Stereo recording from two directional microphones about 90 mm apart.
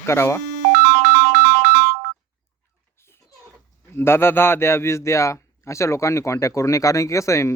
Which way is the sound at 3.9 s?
25° left (ahead or behind).